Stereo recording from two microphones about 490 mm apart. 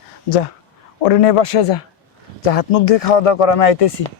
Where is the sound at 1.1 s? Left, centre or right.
Left.